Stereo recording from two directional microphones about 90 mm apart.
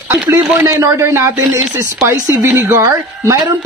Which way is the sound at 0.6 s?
30° right (ahead or behind).